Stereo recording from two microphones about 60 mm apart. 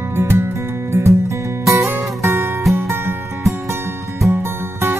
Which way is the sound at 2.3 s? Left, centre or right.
Right.